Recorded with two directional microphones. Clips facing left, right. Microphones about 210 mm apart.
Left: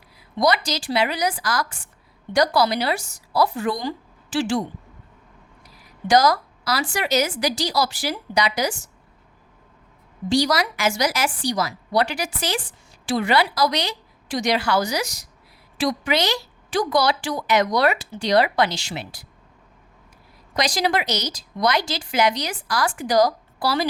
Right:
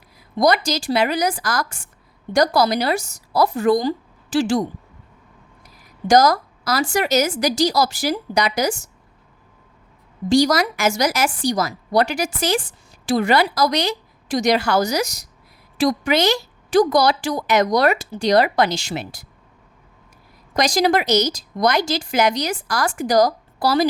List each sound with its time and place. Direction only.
0.3 s a woman's voice: 45° right (ahead or behind)
5.6 s a sound: 45° right (ahead or behind)
6.9 s a woman's voice: 45° right (ahead or behind)
10.2 s a woman's voice: 45° right (ahead or behind)
20.6 s a woman's voice: 45° right (ahead or behind)